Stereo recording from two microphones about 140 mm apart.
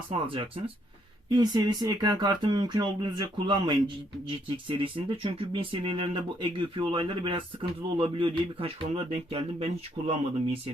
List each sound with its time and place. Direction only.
0.1 s speech: 40° right (ahead or behind)